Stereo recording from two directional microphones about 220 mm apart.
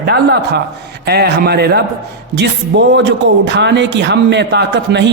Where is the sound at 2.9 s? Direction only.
55° right (ahead or behind).